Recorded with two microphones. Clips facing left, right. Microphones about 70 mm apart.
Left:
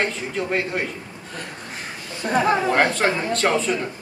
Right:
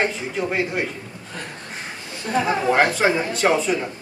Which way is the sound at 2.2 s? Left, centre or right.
Left.